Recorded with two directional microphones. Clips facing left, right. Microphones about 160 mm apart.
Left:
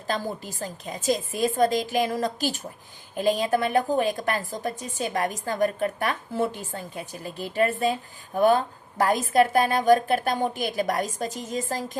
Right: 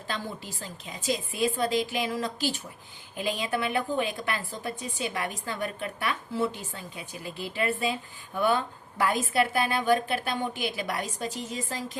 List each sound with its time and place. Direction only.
0.1 s a woman's voice: 40° left (ahead or behind)